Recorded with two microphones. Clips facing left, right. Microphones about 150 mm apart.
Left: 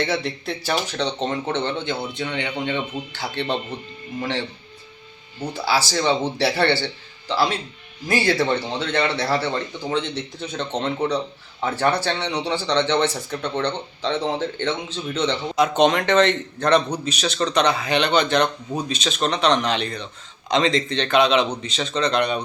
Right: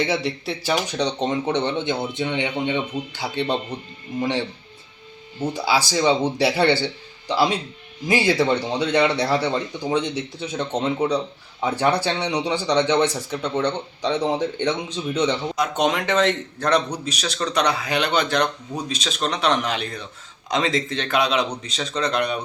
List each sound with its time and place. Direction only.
0.3 s speech: 10° right (ahead or behind)
15.5 s speech: centre (ahead or behind)